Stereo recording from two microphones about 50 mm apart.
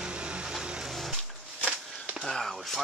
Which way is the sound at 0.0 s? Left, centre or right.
Right.